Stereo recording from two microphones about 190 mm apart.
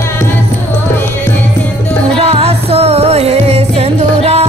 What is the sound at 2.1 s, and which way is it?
Music, 30° right (ahead or behind).